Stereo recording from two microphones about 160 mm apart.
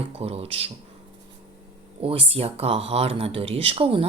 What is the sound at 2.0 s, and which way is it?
Speech, 35° right (ahead or behind).